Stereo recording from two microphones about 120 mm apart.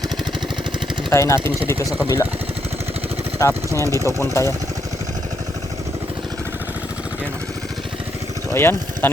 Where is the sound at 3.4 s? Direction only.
25° left (ahead or behind).